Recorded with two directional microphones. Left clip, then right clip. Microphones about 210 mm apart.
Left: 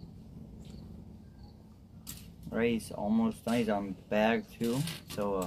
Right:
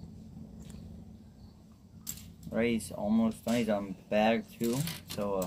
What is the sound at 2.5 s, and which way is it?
Speech, 10° left (ahead or behind).